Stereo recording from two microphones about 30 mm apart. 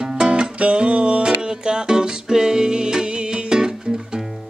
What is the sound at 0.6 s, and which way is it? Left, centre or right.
Music, right.